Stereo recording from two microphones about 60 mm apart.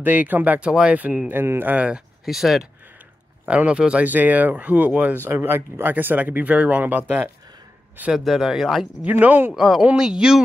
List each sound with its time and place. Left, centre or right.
0.0 s speech: right
1.3 s speech: right
2.2 s speech: centre
3.4 s speech: right
4.1 s speech: right
8.2 s speech: centre
9.2 s speech: right
9.6 s speech: centre